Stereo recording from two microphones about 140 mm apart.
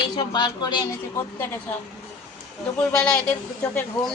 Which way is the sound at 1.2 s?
15° left (ahead or behind).